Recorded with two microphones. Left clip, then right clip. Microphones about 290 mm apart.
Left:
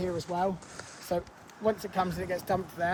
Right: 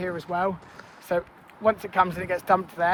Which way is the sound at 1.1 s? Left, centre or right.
Right.